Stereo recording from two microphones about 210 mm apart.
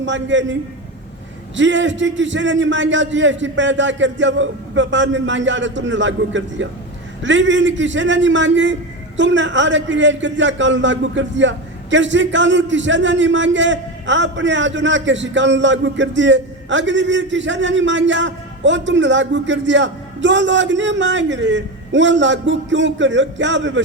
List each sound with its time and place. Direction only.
0.0 s a man's voice: 60° right (ahead or behind)
1.5 s a man's voice: 60° right (ahead or behind)